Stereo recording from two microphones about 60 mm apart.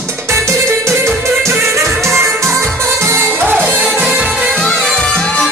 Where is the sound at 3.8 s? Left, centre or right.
Centre.